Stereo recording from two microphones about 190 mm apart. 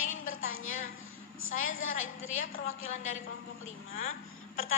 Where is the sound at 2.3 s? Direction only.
45° left (ahead or behind).